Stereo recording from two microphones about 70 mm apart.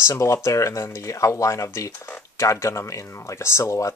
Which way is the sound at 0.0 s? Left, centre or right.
Left.